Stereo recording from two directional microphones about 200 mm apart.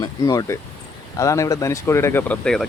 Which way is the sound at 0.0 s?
15° left (ahead or behind).